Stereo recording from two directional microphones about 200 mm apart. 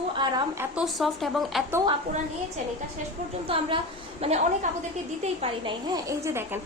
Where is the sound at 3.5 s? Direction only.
25° right (ahead or behind).